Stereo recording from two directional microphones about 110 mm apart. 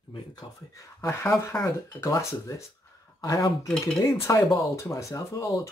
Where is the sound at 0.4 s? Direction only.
55° left (ahead or behind).